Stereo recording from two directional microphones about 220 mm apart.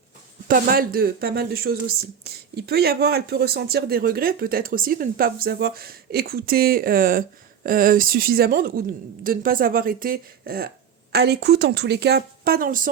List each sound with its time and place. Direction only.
0.4 s speech: 40° right (ahead or behind)